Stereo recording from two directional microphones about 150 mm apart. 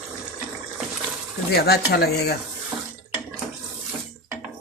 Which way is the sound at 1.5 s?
90° left.